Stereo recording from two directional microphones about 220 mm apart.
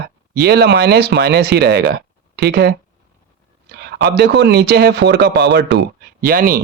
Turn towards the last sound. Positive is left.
turn(degrees=-40)  # may be behind; listen again after turning